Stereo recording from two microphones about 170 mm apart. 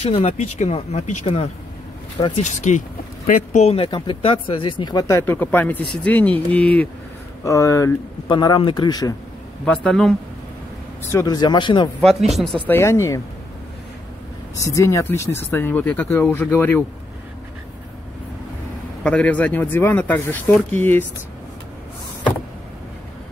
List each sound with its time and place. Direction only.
0.0 s speech: 40° left (ahead or behind)
2.4 s speech: 45° left (ahead or behind)
3.6 s speech: 35° left (ahead or behind)
9.7 s a man's voice: 5° left (ahead or behind)
11.1 s speech: 20° left (ahead or behind)
12.0 s speech: centre (ahead or behind); by 13.2 s 15° left (ahead or behind)
14.6 s speech: 20° left (ahead or behind)
19.0 s speech: 5° left (ahead or behind)